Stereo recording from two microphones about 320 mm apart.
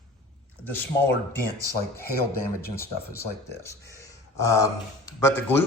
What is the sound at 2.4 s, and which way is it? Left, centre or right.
Speech, left.